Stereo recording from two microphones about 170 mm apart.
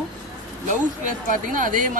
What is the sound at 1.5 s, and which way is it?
Speech, 50° right (ahead or behind).